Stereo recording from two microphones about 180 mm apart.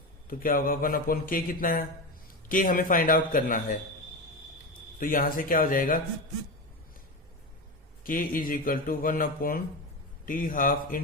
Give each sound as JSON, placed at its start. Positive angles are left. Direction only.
{"t": 0.3, "sound": "a man's voice", "side_deg": 50}
{"t": 4.9, "sound": "a man's voice", "side_deg": 50}
{"t": 8.0, "sound": "a man's voice", "side_deg": 50}